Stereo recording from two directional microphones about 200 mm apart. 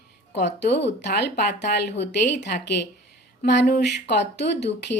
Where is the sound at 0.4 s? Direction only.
60° left (ahead or behind).